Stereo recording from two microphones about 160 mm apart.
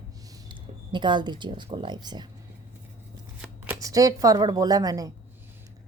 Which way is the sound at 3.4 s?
5° right (ahead or behind).